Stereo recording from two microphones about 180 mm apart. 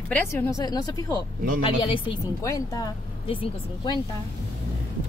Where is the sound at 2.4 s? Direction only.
20° left (ahead or behind).